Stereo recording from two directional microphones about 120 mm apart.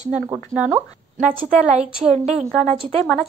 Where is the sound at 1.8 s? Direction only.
70° right (ahead or behind).